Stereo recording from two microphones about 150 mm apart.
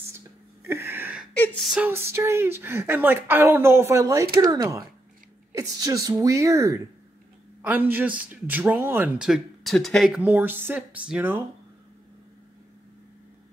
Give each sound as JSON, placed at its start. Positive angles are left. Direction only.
{"t": 0.7, "sound": "a sound", "side_deg": -15}
{"t": 1.3, "sound": "speech", "side_deg": 10}
{"t": 1.7, "sound": "a man's voice", "side_deg": -10}